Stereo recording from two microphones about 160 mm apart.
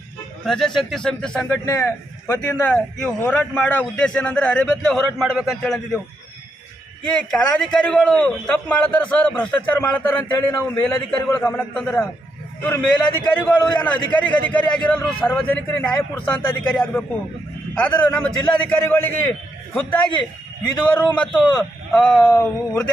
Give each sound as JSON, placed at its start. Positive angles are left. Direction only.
{"t": 0.4, "sound": "a man's voice", "side_deg": 0}
{"t": 7.0, "sound": "a man's voice", "side_deg": 5}
{"t": 17.7, "sound": "a man's voice", "side_deg": 10}